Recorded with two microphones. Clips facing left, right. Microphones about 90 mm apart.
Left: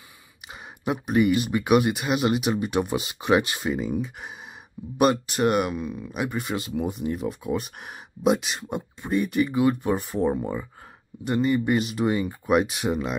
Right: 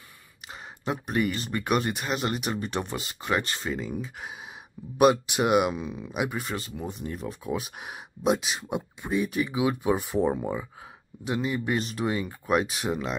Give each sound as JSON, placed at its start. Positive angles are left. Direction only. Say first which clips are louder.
{"t": 0.5, "sound": "a sound", "louder": "left 3 dB", "side_deg": 5}
{"t": 1.3, "sound": "speech", "louder": "left 7 dB", "side_deg": 15}
{"t": 3.0, "sound": "speech", "louder": "left 7 dB", "side_deg": 20}
{"t": 5.7, "sound": "speech", "louder": "left 1 dB", "side_deg": -20}
{"t": 6.1, "sound": "speech", "louder": "even", "side_deg": -5}
{"t": 6.5, "sound": "speech", "louder": "left 6 dB", "side_deg": 15}
{"t": 6.9, "sound": "speech", "louder": "left 6 dB", "side_deg": 5}